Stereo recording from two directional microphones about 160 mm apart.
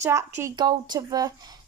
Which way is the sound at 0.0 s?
15° right (ahead or behind).